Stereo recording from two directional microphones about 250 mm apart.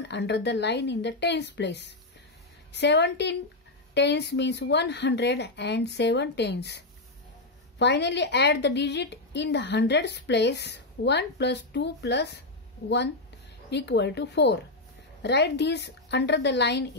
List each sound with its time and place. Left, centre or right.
0.1 s a woman's voice: left
7.8 s a woman's voice: left
13.7 s a woman's voice: left